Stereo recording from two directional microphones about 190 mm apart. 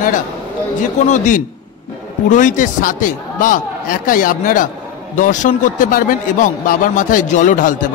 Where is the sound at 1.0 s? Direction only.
40° left (ahead or behind).